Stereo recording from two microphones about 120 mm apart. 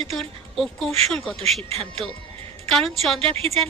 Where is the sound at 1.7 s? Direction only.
60° right (ahead or behind).